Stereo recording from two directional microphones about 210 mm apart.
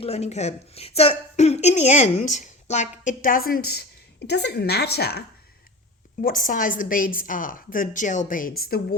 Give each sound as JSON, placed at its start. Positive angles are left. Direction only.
{"t": 0.0, "sound": "a woman's voice", "side_deg": 30}
{"t": 6.2, "sound": "a woman's voice", "side_deg": 40}